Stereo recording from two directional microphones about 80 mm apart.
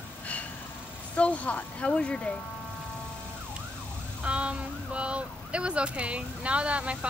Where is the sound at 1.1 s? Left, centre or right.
Centre.